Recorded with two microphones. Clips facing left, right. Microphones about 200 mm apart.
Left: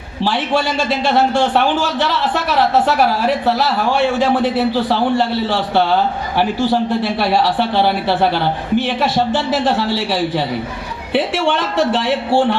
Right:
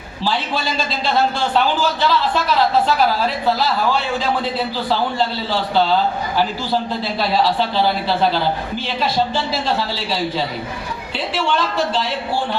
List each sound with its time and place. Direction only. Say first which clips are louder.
0.9 s a man's voice: left 2 dB; 70° left (ahead or behind)
2.8 s a man's voice: left 3 dB; 70° left (ahead or behind)